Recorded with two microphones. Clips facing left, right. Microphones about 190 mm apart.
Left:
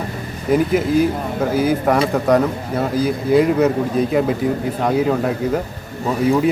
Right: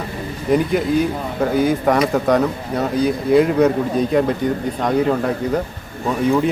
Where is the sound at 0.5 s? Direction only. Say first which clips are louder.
Left 1 dB; centre (ahead or behind).